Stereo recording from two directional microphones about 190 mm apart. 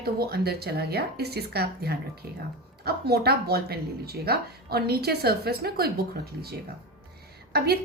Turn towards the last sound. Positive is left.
turn(degrees=-55)  # may be behind; listen again after turning